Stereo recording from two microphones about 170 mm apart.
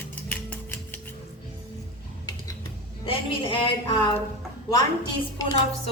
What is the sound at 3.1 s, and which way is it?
A woman's voice, 25° left (ahead or behind).